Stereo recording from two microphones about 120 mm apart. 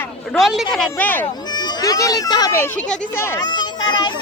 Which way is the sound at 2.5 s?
20° left (ahead or behind).